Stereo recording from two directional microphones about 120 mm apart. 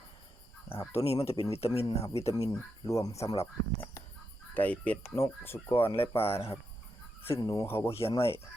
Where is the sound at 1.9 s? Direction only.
60° left (ahead or behind).